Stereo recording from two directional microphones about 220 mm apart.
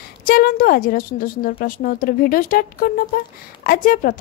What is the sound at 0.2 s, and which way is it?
A woman's voice, 40° left (ahead or behind).